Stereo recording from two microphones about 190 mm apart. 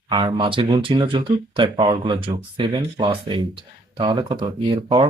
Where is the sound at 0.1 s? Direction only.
25° right (ahead or behind).